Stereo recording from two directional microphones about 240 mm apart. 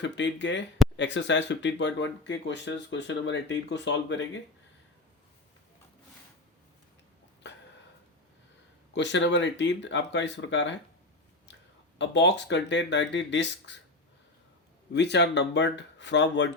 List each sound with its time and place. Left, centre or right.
0.0 s speech: left
7.4 s a sound: left
8.9 s speech: left
11.9 s speech: left
14.9 s speech: left